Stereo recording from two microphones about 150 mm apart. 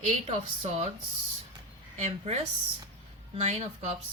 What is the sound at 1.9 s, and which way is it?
A woman's voice, 50° right (ahead or behind).